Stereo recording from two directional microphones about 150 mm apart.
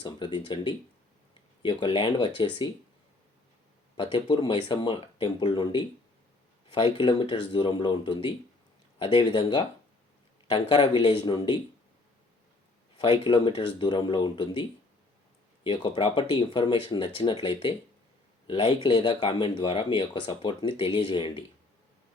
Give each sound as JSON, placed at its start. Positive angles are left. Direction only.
{"t": 0.0, "sound": "speech", "side_deg": 30}
{"t": 3.9, "sound": "speech", "side_deg": 30}
{"t": 13.0, "sound": "speech", "side_deg": 30}
{"t": 15.6, "sound": "speech", "side_deg": 35}